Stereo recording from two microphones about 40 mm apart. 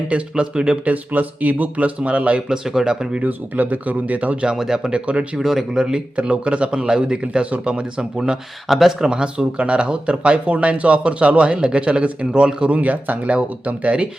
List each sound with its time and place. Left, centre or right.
0.1 s speech: right
0.9 s speech: right
2.5 s speech: centre
3.2 s speech: right
4.5 s speech: centre
4.9 s speech: right
5.4 s speech: centre
6.1 s speech: right
8.6 s speech: centre
9.0 s speech: right
12.7 s speech: right